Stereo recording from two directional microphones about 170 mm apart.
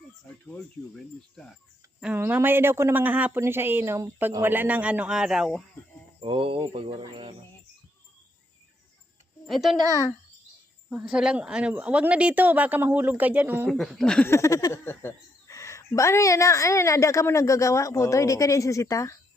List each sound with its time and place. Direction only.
0.3 s a woman's voice: 10° left (ahead or behind)
2.0 s speech: 10° right (ahead or behind)
6.1 s speech: 30° right (ahead or behind)
9.5 s speech: centre (ahead or behind)
9.9 s speech: 20° left (ahead or behind)
10.8 s speech: 5° right (ahead or behind)
13.7 s speech: centre (ahead or behind)
14.3 s a woman's voice: 20° left (ahead or behind)